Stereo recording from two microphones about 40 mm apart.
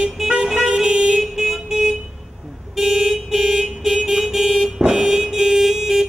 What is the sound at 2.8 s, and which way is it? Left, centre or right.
Vehicle, centre.